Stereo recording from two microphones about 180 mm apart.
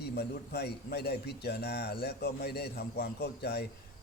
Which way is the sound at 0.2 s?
60° left (ahead or behind).